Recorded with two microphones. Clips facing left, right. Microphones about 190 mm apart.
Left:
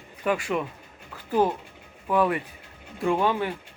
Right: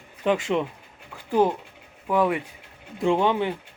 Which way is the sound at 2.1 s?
15° right (ahead or behind).